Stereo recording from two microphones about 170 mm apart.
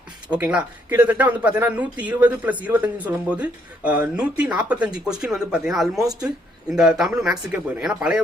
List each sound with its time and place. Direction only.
0.3 s speech: 5° right (ahead or behind)